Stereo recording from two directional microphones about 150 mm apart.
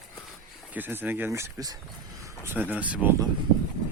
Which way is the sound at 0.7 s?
10° right (ahead or behind).